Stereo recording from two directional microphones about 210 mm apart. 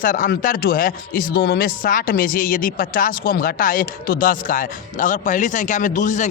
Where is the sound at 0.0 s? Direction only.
40° left (ahead or behind).